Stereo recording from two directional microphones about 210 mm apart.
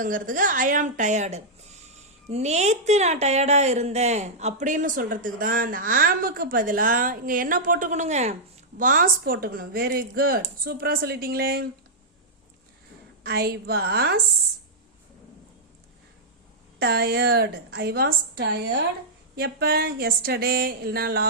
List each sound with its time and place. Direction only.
0.0 s speech: 40° right (ahead or behind)
13.2 s speech: 45° right (ahead or behind)
16.8 s speech: 50° right (ahead or behind)